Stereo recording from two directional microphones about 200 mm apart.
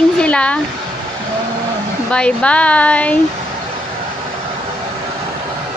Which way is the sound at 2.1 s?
5° left (ahead or behind).